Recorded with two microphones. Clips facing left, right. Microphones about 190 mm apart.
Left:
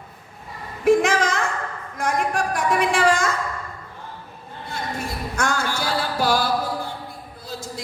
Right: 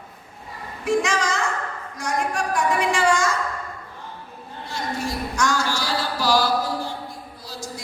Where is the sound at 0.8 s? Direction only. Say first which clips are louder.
Left 5 dB; 55° left (ahead or behind).